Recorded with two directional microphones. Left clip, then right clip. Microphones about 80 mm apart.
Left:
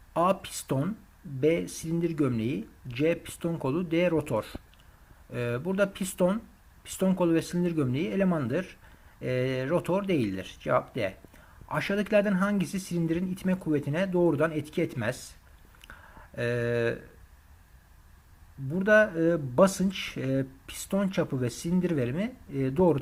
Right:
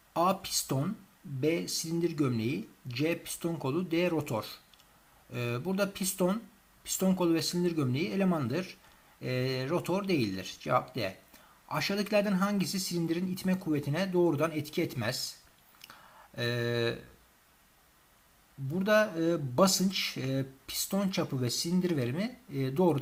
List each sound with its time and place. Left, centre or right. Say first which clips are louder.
0.1 s speech: left 3 dB; left
15.9 s a sound: left 6 dB; left
18.7 s speech: left 5 dB; left